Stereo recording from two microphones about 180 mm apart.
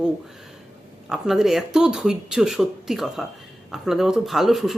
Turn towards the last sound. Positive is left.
turn(degrees=0)  # may be behind; listen again after turning